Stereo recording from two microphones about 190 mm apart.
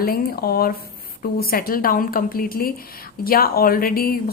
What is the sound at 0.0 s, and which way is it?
A woman's voice, 50° left (ahead or behind).